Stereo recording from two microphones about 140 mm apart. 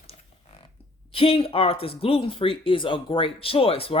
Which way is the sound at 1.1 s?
40° left (ahead or behind).